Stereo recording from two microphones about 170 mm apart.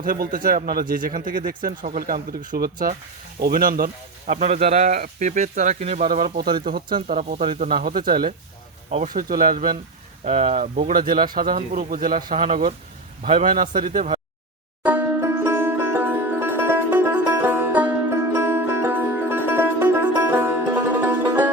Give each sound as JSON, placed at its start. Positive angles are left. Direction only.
{"t": 0.0, "sound": "speech", "side_deg": -55}
{"t": 4.9, "sound": "speech", "side_deg": -50}
{"t": 6.0, "sound": "speech", "side_deg": -55}
{"t": 7.1, "sound": "speech", "side_deg": -40}
{"t": 7.7, "sound": "speech", "side_deg": -60}
{"t": 8.9, "sound": "speech", "side_deg": -40}
{"t": 9.1, "sound": "speech", "side_deg": -55}
{"t": 10.4, "sound": "speech", "side_deg": -40}
{"t": 14.8, "sound": "music", "side_deg": -10}